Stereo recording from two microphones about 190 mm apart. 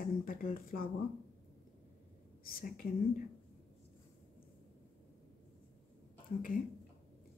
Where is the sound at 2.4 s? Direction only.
50° left (ahead or behind).